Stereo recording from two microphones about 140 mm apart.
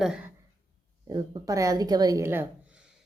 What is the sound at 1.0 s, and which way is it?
A woman's voice, 30° right (ahead or behind).